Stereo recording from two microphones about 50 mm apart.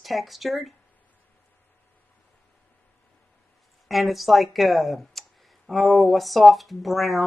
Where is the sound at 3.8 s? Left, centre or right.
Centre.